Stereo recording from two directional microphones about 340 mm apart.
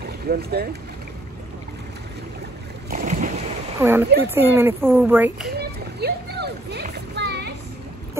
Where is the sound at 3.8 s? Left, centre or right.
Centre.